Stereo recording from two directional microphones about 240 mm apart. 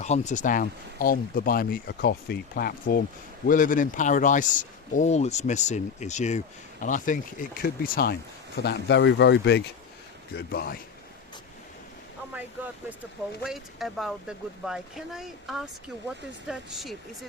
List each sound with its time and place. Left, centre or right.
0.0 s speech: left
13.4 s speech: centre